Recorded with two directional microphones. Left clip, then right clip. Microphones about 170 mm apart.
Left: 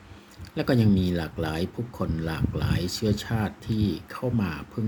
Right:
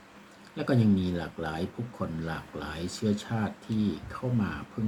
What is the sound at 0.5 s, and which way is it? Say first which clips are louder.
Speech: left 3 dB; 55° left (ahead or behind).